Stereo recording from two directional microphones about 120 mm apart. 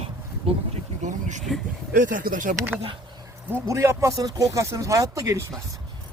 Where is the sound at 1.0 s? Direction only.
90° right.